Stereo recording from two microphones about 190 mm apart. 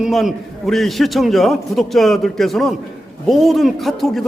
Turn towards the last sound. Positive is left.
turn(degrees=0)  # may be behind; listen again after turning